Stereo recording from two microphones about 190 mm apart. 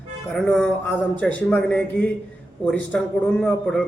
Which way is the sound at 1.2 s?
5° left (ahead or behind).